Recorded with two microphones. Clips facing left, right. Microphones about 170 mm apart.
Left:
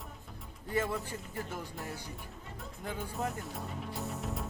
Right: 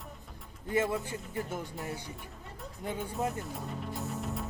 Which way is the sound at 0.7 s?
20° right (ahead or behind).